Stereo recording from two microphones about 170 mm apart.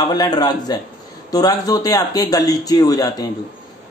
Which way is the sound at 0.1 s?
25° left (ahead or behind).